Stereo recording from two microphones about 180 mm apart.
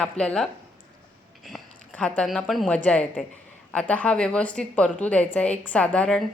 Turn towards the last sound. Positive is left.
turn(degrees=5)  # may be behind; listen again after turning